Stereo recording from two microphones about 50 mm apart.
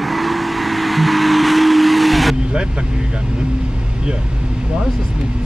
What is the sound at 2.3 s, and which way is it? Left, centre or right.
Vehicle, centre.